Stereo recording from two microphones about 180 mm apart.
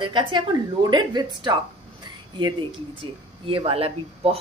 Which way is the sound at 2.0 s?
25° right (ahead or behind).